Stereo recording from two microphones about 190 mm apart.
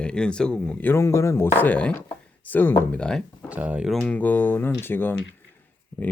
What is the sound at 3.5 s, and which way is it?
Speech, 10° right (ahead or behind).